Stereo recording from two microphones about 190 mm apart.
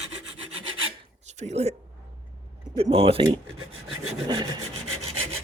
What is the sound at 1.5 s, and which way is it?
Speech, 35° right (ahead or behind).